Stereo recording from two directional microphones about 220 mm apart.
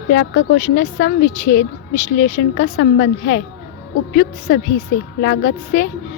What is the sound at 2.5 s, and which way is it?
Speech, 50° left (ahead or behind).